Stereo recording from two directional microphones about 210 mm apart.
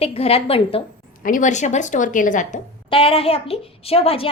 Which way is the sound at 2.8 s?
25° left (ahead or behind).